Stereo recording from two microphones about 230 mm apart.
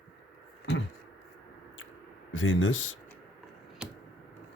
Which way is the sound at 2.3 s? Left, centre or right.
Left.